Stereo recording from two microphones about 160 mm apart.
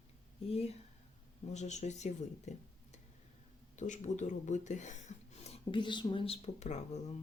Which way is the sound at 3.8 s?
50° left (ahead or behind).